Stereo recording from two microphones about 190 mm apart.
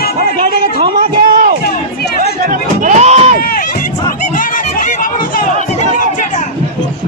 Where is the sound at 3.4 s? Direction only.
50° left (ahead or behind).